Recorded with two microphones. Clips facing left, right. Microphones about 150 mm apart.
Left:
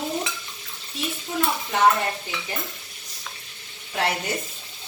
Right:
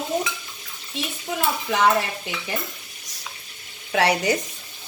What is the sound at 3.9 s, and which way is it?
Speech, 85° right.